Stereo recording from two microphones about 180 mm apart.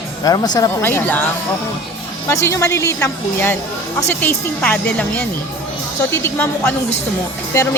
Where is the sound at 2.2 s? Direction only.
15° left (ahead or behind).